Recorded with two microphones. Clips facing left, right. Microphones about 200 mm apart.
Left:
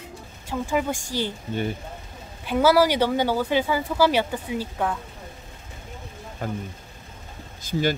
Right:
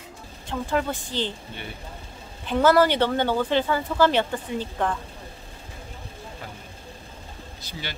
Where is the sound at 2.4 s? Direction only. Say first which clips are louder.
Even; 10° left (ahead or behind).